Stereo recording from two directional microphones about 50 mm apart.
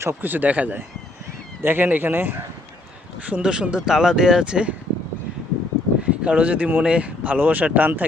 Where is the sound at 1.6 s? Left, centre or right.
Right.